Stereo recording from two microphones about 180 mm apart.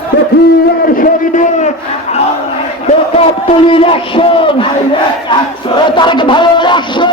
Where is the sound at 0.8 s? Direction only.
50° left (ahead or behind).